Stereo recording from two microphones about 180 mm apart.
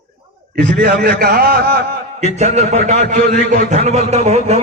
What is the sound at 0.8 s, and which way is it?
A man's voice, 60° right (ahead or behind).